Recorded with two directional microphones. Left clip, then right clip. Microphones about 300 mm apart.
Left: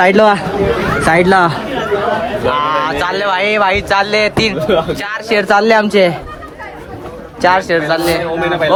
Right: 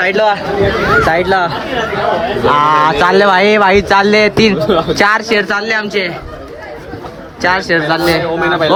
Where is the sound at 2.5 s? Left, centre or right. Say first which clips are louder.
Right 5 dB; centre.